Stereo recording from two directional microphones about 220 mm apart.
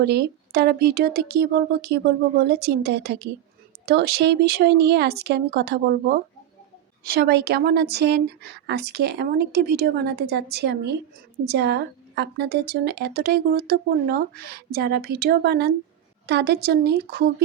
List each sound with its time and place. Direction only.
0.0 s a woman's voice: 45° right (ahead or behind)